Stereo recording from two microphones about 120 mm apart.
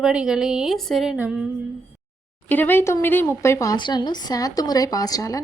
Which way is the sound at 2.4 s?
15° left (ahead or behind).